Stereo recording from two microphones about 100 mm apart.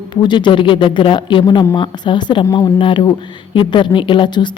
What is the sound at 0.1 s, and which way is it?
A woman's voice, 50° left (ahead or behind).